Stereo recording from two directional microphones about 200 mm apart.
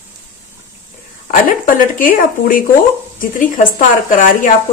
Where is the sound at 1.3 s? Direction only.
40° left (ahead or behind).